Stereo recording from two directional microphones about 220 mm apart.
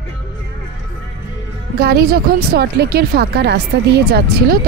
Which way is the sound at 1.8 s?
45° right (ahead or behind).